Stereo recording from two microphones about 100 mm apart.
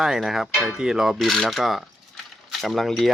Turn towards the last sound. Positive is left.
turn(degrees=0)  # may be behind; listen again after turning